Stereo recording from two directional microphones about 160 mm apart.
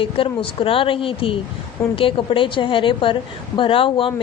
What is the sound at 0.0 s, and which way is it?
A woman's voice, 35° left (ahead or behind).